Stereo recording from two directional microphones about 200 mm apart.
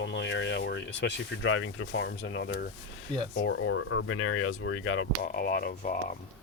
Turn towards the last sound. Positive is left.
turn(degrees=40)  # may be behind; listen again after turning